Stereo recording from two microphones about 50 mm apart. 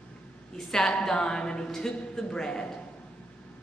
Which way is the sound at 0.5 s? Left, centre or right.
Centre.